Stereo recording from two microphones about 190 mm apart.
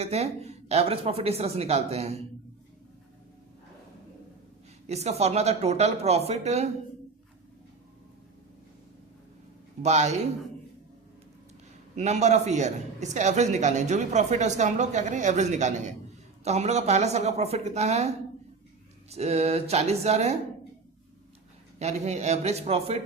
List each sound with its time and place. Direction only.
0.0 s a man's voice: 35° right (ahead or behind)
4.9 s a man's voice: 35° right (ahead or behind)
9.8 s a man's voice: 35° right (ahead or behind)
11.9 s a man's voice: 35° right (ahead or behind)
19.1 s a man's voice: 35° right (ahead or behind)
21.8 s a man's voice: 35° right (ahead or behind)